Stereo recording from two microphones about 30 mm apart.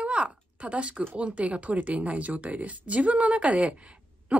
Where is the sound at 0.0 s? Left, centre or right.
Right.